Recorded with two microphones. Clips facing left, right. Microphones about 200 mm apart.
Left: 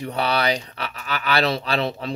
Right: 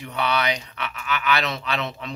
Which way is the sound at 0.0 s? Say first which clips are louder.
Left 2 dB; 35° left (ahead or behind).